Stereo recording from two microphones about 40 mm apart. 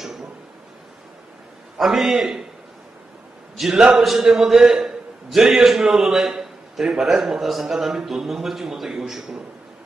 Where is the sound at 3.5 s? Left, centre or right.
Centre.